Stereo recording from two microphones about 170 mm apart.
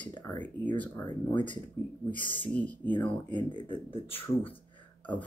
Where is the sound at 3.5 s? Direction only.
30° left (ahead or behind).